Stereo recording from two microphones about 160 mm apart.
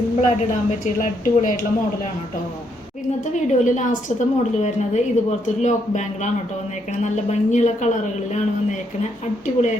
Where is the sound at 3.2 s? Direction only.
50° left (ahead or behind).